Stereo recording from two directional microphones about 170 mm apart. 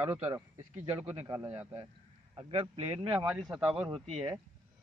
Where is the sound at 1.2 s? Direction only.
15° right (ahead or behind).